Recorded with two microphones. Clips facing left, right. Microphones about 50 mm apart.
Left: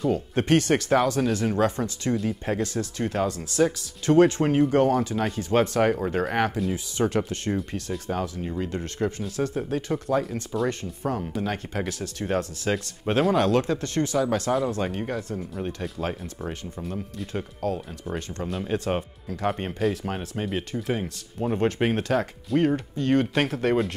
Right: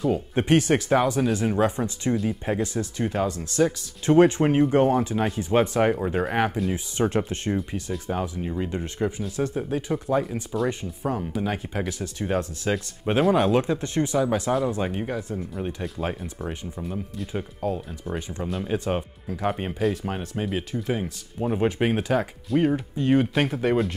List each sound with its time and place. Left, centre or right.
0.0 s speech: centre
4.0 s speech: centre
6.7 s speech: right
7.5 s speech: centre
9.2 s speech: centre
13.3 s speech: centre